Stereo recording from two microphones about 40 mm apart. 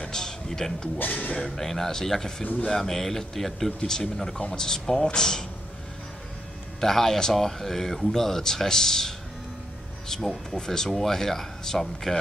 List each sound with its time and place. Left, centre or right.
0.1 s a sound: centre
0.9 s speech: left
1.4 s speech: centre
6.8 s speech: centre